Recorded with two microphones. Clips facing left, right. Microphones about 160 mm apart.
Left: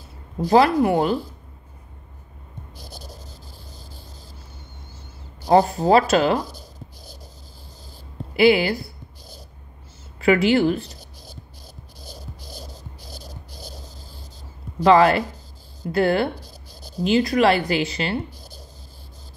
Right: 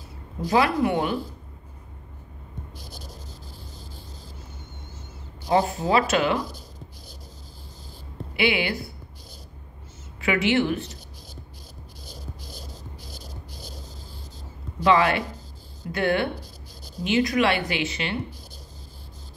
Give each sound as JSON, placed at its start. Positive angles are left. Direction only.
{"t": 0.4, "sound": "speech", "side_deg": 35}
{"t": 5.4, "sound": "speech", "side_deg": 40}
{"t": 8.4, "sound": "speech", "side_deg": 40}
{"t": 10.2, "sound": "a sound", "side_deg": 35}
{"t": 12.0, "sound": "music", "side_deg": 35}
{"t": 14.8, "sound": "speech", "side_deg": 35}